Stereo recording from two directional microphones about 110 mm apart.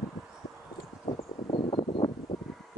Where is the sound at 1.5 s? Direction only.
50° left (ahead or behind).